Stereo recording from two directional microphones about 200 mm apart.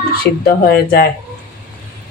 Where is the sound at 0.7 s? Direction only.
50° left (ahead or behind).